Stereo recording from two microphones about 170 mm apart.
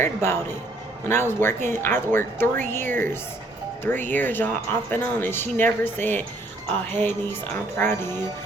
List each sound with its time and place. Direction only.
0.0 s speech: 15° left (ahead or behind)